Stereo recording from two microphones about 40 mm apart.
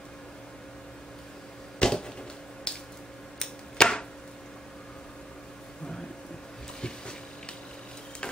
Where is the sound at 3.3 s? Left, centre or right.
Centre.